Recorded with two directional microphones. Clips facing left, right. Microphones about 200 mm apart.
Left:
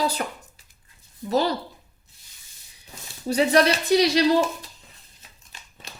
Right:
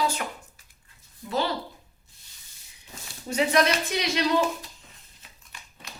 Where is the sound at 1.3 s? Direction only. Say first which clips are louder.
Left 5 dB; 40° left (ahead or behind).